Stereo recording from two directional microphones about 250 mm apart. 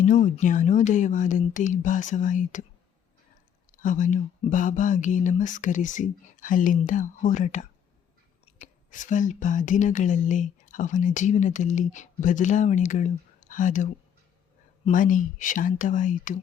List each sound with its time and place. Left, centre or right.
0.0 s speech: left
3.7 s speech: left
14.8 s speech: left